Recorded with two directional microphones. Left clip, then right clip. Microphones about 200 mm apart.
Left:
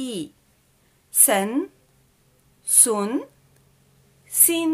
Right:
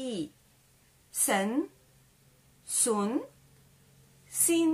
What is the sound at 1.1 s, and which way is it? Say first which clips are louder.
Speech: left 8 dB; 50° left (ahead or behind).